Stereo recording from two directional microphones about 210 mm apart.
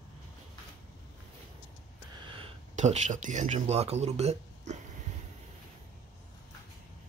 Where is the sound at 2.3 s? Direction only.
25° right (ahead or behind).